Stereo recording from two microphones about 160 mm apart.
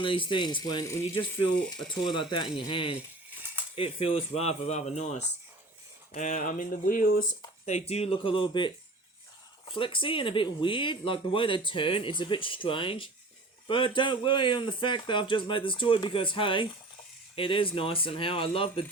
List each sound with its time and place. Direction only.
0.0 s speech: 30° left (ahead or behind); by 7.3 s 55° left (ahead or behind)
7.6 s speech: 45° left (ahead or behind)